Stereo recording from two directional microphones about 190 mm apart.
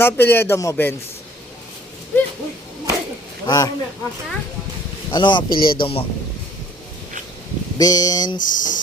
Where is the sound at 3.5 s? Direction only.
20° left (ahead or behind).